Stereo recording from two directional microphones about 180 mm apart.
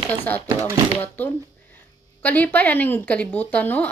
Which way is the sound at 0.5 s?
15° right (ahead or behind).